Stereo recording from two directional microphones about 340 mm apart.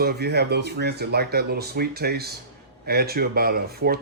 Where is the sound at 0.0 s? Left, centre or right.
Right.